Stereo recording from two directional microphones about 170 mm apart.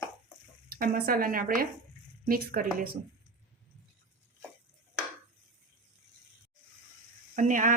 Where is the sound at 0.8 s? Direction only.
60° right (ahead or behind).